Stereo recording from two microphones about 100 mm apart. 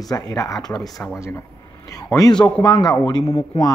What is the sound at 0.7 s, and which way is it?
Speech, 5° left (ahead or behind).